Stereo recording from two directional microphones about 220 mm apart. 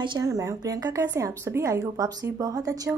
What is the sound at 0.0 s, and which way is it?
A woman's voice, 20° right (ahead or behind).